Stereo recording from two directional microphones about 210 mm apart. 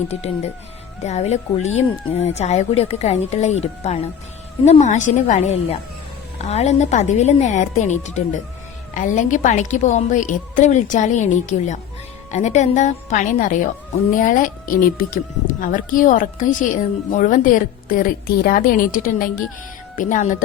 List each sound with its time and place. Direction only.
0.1 s speech: 30° left (ahead or behind)